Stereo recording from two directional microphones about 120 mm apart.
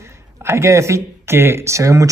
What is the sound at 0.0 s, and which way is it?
Speech, 20° right (ahead or behind).